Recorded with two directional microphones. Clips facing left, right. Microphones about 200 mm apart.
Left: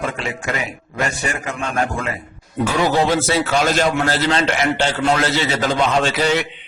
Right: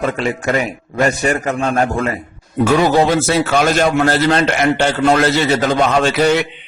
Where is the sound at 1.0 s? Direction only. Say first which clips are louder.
Right 8 dB; 40° right (ahead or behind).